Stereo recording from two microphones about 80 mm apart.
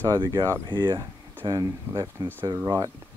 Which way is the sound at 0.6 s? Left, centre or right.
Right.